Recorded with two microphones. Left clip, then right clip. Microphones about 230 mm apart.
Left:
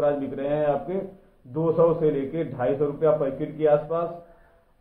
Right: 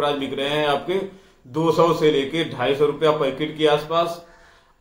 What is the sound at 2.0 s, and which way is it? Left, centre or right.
A man's voice, centre.